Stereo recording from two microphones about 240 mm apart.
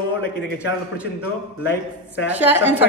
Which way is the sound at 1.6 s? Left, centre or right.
Left.